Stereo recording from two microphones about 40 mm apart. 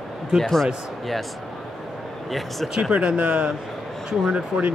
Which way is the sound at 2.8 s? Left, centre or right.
Right.